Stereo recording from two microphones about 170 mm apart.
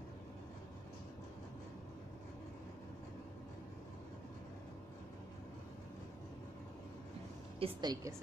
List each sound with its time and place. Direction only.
7.5 s speech: 30° right (ahead or behind)